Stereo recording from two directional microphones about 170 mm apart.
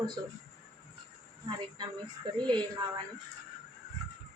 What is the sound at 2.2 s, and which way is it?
Speech, 30° right (ahead or behind).